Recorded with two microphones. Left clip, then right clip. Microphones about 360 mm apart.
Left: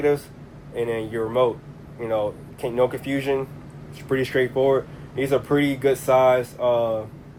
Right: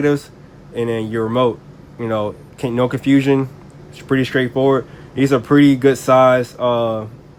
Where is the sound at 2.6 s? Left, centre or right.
Right.